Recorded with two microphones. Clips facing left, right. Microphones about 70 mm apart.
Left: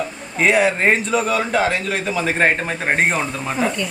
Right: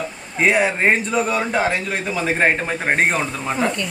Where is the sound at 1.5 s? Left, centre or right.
Right.